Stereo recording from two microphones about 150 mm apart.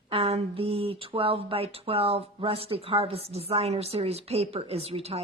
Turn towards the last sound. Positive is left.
turn(degrees=-40)  # may be behind; listen again after turning